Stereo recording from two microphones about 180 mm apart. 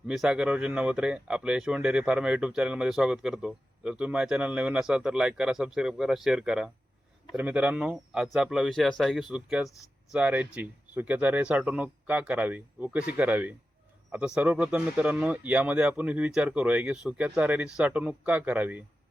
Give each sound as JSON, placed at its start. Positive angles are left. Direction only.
{"t": 0.1, "sound": "speech", "side_deg": -5}